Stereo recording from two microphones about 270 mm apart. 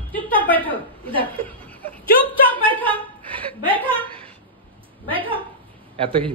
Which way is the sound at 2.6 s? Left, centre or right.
Centre.